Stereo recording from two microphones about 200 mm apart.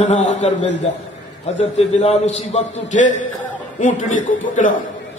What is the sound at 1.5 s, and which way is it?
A man's voice, 35° left (ahead or behind).